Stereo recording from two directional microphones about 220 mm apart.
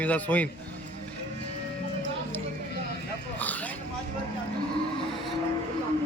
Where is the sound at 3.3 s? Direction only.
5° left (ahead or behind).